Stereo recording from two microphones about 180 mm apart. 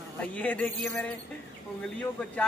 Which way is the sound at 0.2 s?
10° left (ahead or behind).